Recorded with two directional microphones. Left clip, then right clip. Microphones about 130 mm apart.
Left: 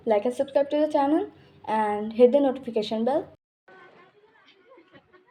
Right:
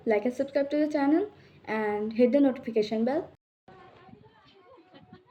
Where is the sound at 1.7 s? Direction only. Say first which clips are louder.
Left 4 dB; 35° left (ahead or behind).